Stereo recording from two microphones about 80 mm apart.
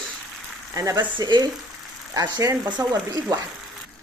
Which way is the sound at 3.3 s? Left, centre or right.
Right.